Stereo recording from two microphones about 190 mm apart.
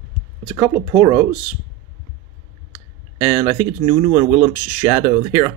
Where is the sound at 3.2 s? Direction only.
25° right (ahead or behind).